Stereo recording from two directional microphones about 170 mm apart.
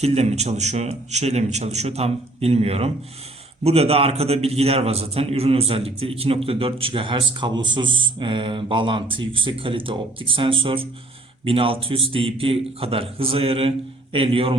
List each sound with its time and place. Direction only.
0.0 s a man's voice: 40° right (ahead or behind)